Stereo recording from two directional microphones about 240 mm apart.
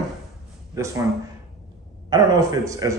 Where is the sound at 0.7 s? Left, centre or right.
Centre.